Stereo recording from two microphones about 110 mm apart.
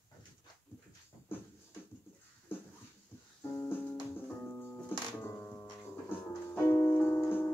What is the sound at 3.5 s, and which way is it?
Music, 20° left (ahead or behind).